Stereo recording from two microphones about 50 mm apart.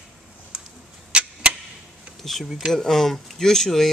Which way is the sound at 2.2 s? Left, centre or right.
Centre.